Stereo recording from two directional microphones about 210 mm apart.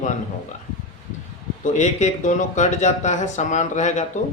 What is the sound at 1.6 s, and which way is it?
Speech, 35° left (ahead or behind).